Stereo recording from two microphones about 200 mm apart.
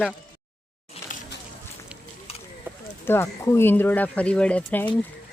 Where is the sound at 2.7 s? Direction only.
10° right (ahead or behind).